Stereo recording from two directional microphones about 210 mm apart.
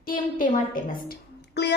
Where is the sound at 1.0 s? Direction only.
55° left (ahead or behind).